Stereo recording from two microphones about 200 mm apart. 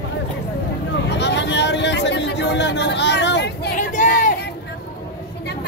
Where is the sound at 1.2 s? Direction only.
60° left (ahead or behind).